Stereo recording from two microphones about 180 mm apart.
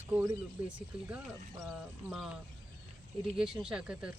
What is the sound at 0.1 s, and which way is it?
Speech, 15° right (ahead or behind).